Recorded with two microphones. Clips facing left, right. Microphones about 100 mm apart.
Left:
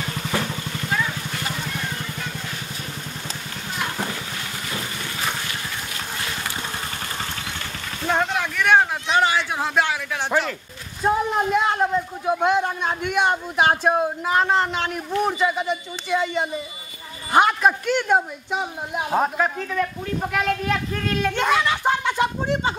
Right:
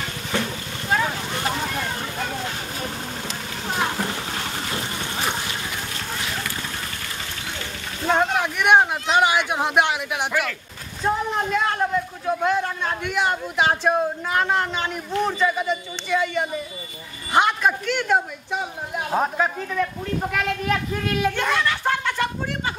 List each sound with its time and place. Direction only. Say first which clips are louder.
8.1 s speech: right 2 dB; 15° right (ahead or behind)
11.1 s a man's voice: left 2 dB; 10° left (ahead or behind)
15.0 s a man's voice: even; 15° left (ahead or behind)
19.1 s a child's voice: left 1 dB; centre (ahead or behind)
21.3 s a man's voice: left 5 dB; 15° left (ahead or behind)